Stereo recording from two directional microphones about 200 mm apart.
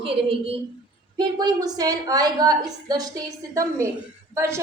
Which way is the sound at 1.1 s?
20° right (ahead or behind).